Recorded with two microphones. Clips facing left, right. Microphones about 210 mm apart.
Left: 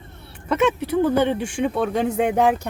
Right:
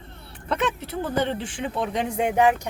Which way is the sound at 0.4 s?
5° left (ahead or behind).